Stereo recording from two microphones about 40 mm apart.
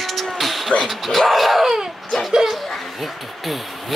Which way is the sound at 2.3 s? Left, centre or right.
Centre.